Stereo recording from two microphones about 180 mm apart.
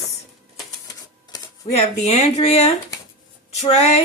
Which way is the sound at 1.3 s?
20° left (ahead or behind).